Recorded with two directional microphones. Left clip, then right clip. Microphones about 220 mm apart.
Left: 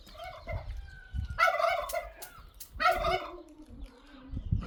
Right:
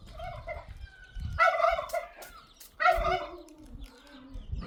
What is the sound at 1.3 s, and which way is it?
Gobble, 45° left (ahead or behind).